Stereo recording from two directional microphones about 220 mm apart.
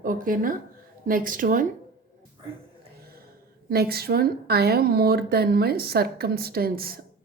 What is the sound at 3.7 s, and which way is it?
A woman's voice, 45° right (ahead or behind).